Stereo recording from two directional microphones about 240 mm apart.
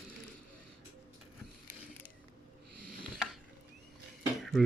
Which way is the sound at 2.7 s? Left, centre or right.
Right.